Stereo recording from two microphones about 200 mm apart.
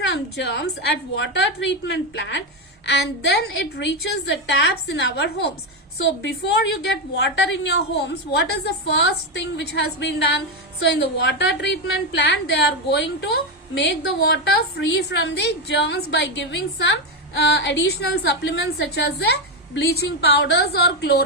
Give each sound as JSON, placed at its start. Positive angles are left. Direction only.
{"t": 0.1, "sound": "a woman's voice", "side_deg": 55}